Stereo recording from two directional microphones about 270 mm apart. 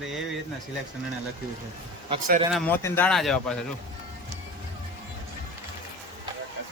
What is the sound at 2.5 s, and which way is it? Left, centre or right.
Speech, centre.